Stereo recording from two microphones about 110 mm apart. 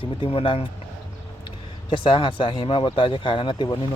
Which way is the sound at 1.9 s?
45° left (ahead or behind).